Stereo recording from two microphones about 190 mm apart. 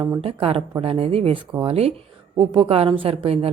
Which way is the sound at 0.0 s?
25° right (ahead or behind).